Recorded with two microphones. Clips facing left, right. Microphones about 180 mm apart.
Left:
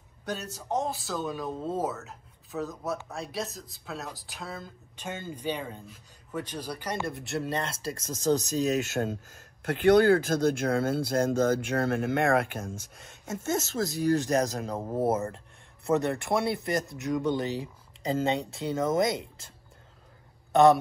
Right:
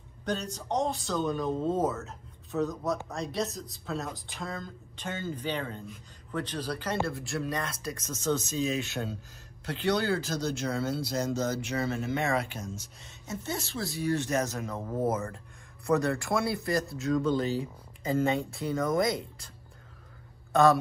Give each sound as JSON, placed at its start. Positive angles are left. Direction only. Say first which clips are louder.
{"t": 0.2, "sound": "speech", "louder": "right 3 dB", "side_deg": 5}
{"t": 15.9, "sound": "speech", "louder": "left 1 dB", "side_deg": 20}